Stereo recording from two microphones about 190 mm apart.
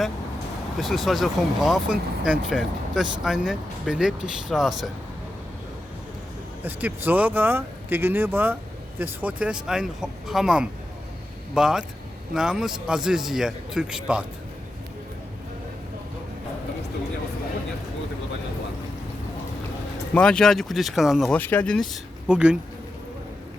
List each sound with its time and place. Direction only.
0.8 s speech: centre (ahead or behind)
6.7 s speech: 10° right (ahead or behind)
20.1 s speech: 5° left (ahead or behind)